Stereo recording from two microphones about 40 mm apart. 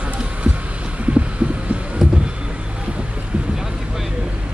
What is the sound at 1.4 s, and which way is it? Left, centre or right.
Heart sounds, right.